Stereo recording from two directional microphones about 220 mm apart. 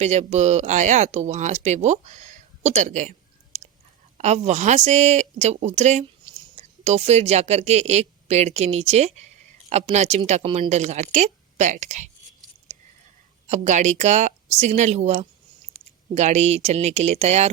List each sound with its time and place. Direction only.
0.0 s a woman's voice: 30° right (ahead or behind)
13.5 s a woman's voice: 35° right (ahead or behind)